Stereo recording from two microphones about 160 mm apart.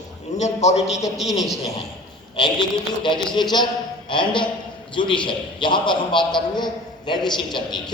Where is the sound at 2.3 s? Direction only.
30° left (ahead or behind).